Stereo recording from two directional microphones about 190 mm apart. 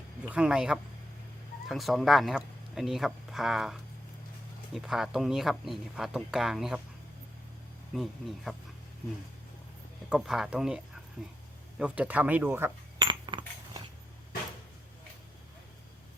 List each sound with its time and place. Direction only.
0.3 s speech: 5° right (ahead or behind)
7.9 s speech: centre (ahead or behind)
10.1 s speech: 5° right (ahead or behind)
13.0 s coin: 25° right (ahead or behind)